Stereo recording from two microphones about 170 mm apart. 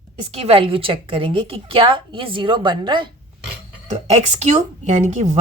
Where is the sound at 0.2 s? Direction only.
35° right (ahead or behind).